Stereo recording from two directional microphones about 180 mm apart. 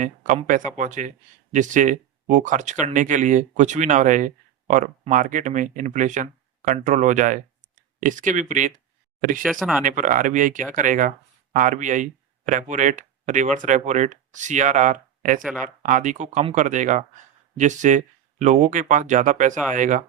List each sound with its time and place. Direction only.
0.4 s speech: 45° right (ahead or behind)
9.4 s speech: centre (ahead or behind)
9.8 s speech: 45° right (ahead or behind)
15.4 s speech: 5° right (ahead or behind)
15.6 s speech: 45° right (ahead or behind)